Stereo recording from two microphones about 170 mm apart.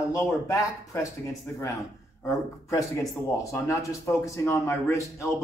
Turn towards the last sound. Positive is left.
turn(degrees=15)  # may be behind; listen again after turning